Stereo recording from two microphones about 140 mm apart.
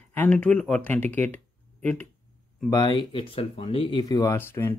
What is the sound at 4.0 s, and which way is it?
Speech, 25° left (ahead or behind).